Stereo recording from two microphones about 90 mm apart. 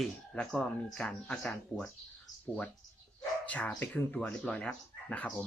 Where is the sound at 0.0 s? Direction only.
5° left (ahead or behind).